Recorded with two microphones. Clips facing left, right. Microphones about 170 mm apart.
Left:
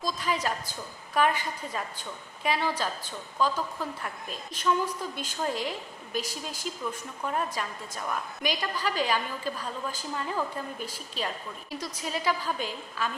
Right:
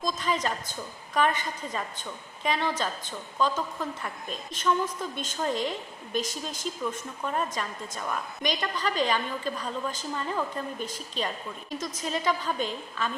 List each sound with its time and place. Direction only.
0.0 s a woman's voice: 10° left (ahead or behind)